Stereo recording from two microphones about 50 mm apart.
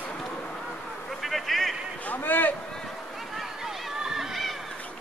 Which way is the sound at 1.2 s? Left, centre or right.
Centre.